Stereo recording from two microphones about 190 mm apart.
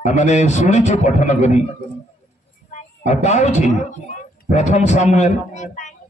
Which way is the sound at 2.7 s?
35° left (ahead or behind).